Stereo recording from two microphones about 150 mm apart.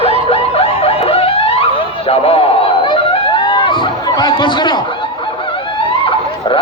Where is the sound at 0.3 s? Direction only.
40° left (ahead or behind).